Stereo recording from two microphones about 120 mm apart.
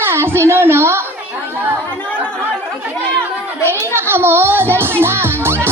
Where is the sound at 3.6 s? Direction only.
20° right (ahead or behind).